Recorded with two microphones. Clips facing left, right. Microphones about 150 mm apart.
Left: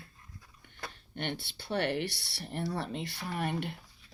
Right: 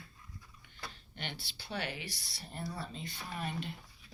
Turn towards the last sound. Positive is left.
turn(degrees=60)  # may be behind; listen again after turning